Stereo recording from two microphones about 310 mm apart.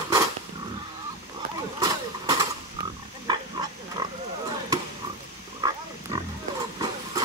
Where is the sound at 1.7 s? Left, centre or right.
Centre.